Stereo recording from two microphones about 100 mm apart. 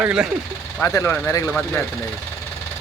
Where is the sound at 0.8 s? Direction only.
25° left (ahead or behind).